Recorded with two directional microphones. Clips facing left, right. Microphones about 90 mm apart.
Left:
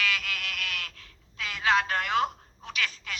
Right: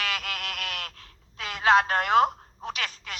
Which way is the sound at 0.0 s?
40° right (ahead or behind).